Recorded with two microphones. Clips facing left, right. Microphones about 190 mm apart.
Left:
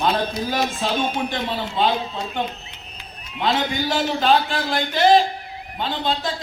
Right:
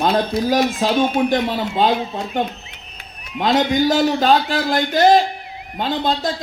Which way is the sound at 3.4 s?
40° right (ahead or behind).